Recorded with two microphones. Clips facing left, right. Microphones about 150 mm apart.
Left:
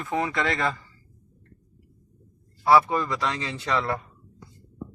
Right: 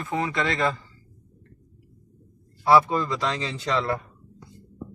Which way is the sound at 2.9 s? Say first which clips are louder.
Right 1 dB; 25° right (ahead or behind).